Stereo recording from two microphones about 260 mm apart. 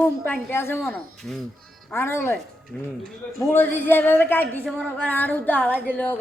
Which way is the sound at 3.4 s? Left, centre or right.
Centre.